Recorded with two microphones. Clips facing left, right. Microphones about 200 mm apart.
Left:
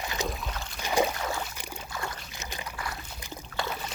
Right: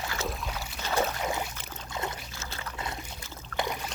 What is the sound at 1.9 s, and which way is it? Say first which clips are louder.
Boat: right 3 dB; 20° right (ahead or behind).